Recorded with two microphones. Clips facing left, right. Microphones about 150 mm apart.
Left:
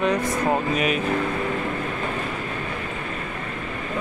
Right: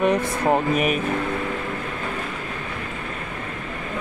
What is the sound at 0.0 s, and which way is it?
Speech, 20° right (ahead or behind).